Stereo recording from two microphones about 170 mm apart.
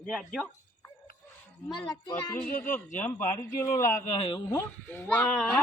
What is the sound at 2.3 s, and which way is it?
Speech, 10° left (ahead or behind).